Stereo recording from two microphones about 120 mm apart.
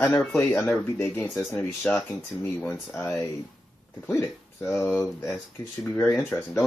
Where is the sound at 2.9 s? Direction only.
15° left (ahead or behind).